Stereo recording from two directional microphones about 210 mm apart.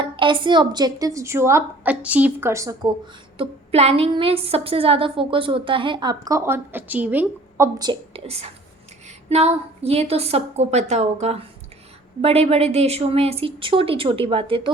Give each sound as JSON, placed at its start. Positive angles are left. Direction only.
{"t": 0.0, "sound": "a woman's voice", "side_deg": -25}
{"t": 3.3, "sound": "a woman's voice", "side_deg": -25}